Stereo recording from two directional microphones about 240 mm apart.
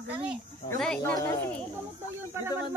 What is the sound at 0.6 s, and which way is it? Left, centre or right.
Speech, centre.